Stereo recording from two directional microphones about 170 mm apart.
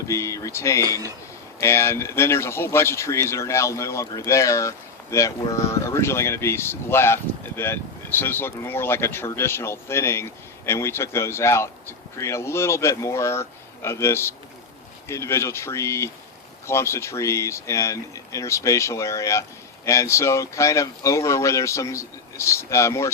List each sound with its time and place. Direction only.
0.1 s speech: 15° left (ahead or behind)